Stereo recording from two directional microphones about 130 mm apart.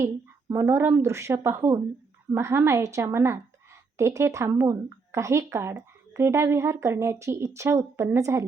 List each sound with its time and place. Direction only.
0.0 s speech: 20° right (ahead or behind)